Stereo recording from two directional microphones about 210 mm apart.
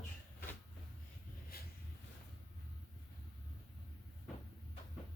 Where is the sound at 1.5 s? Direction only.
45° left (ahead or behind).